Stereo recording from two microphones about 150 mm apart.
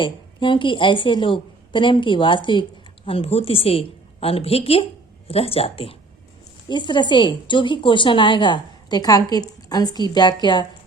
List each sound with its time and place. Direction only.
0.0 s a woman's voice: 35° left (ahead or behind)